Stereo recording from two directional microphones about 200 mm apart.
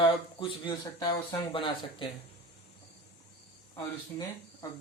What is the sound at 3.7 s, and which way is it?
Speech, 20° left (ahead or behind).